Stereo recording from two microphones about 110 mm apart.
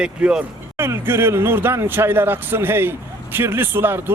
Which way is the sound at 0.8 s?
20° right (ahead or behind).